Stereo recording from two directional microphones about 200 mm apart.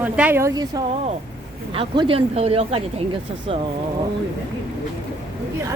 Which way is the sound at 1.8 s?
25° right (ahead or behind).